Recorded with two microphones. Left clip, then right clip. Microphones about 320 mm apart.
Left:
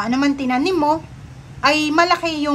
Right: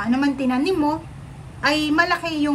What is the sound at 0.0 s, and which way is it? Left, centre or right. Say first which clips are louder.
A woman's voice: left 2 dB; centre.